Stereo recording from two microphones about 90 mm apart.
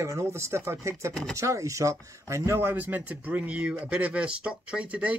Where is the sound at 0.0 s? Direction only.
35° right (ahead or behind).